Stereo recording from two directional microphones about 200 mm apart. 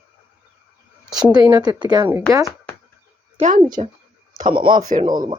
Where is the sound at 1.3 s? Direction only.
15° right (ahead or behind).